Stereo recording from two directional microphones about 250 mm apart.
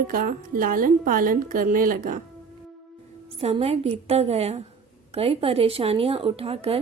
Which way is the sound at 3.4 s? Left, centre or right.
Right.